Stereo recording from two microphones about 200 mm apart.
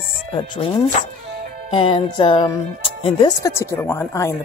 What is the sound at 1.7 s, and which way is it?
Speech, 25° left (ahead or behind).